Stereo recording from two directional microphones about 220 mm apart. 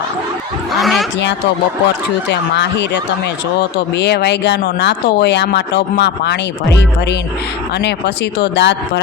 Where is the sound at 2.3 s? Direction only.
50° left (ahead or behind).